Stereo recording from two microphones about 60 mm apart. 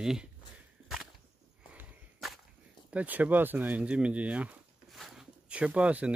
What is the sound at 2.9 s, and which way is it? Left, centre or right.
Speech, right.